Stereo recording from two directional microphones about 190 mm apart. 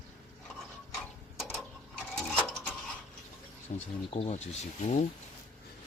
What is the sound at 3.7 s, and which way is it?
Speech, 40° left (ahead or behind).